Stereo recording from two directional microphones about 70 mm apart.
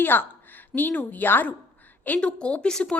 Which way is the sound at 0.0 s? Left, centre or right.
Left.